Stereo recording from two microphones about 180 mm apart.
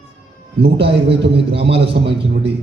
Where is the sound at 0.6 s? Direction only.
70° right (ahead or behind).